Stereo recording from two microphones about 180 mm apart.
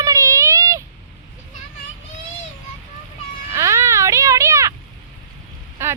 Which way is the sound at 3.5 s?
15° right (ahead or behind).